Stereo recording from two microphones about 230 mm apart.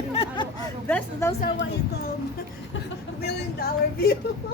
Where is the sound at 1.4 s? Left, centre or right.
Left.